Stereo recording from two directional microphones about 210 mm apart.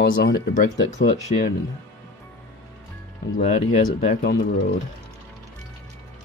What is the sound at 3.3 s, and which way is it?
Speech, 35° left (ahead or behind).